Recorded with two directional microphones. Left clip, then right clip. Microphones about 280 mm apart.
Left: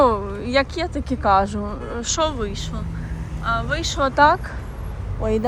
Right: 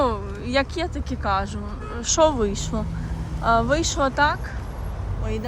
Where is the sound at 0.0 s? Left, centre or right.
Centre.